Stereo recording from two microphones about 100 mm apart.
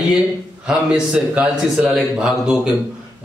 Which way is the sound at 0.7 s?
10° right (ahead or behind).